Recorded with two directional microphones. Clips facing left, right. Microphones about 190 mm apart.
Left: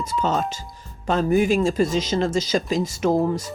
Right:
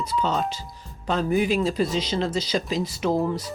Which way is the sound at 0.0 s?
45° left (ahead or behind).